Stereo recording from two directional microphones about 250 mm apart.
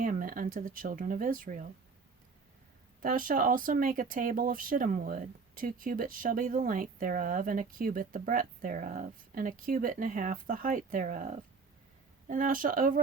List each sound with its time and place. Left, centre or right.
0.0 s speech: right
3.0 s speech: right